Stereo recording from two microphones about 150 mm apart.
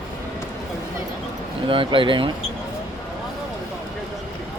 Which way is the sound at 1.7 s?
35° right (ahead or behind).